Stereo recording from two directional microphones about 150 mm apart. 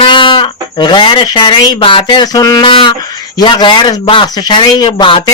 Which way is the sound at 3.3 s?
30° left (ahead or behind).